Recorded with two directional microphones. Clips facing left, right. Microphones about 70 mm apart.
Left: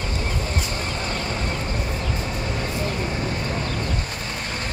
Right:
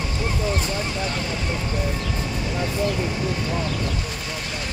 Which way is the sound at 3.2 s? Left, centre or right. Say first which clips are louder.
Right 1 dB; left.